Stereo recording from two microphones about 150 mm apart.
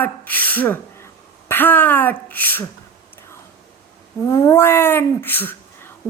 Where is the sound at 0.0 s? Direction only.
10° left (ahead or behind).